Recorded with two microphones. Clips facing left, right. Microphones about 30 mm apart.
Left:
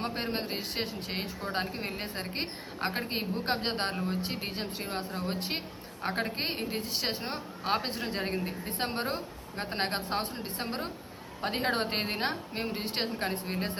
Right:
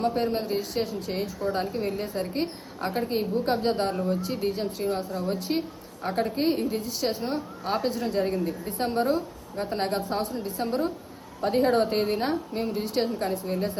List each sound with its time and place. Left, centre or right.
0.0 s a woman's voice: left
5.4 s a woman's voice: left
6.0 s a woman's voice: left
12.8 s a woman's voice: left